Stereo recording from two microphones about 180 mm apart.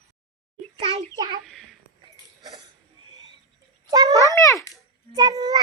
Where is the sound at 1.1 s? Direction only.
20° right (ahead or behind).